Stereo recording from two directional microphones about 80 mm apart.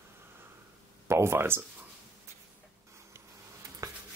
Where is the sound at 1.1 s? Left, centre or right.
Right.